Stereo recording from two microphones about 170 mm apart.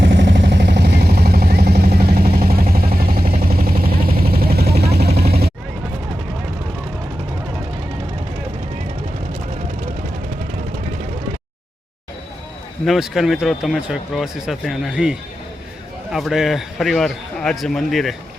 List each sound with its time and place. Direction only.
0.0 s vehicle: 90° right; by 5.5 s 65° right (ahead or behind)
12.8 s speech: centre (ahead or behind)
16.1 s speech: centre (ahead or behind)